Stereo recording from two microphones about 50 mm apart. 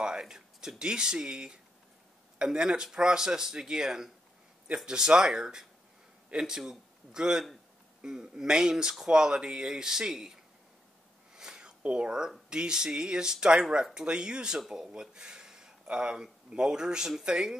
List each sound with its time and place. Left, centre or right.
0.0 s speech: centre
11.3 s a sound: centre
11.8 s speech: right